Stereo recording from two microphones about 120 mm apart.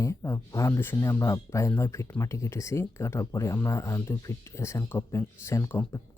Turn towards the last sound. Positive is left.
turn(degrees=25)  # may be behind; listen again after turning